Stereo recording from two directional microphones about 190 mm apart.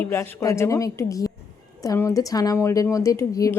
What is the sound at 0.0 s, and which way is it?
A woman's voice, 10° left (ahead or behind).